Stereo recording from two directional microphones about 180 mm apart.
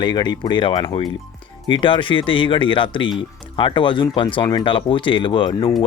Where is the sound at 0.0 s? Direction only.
25° left (ahead or behind).